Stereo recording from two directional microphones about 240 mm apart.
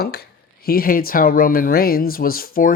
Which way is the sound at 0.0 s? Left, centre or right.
Left.